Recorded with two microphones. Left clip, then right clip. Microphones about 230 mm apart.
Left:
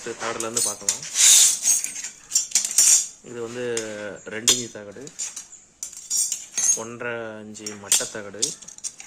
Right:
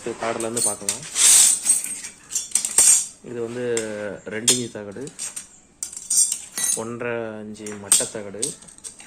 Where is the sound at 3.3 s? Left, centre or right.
Centre.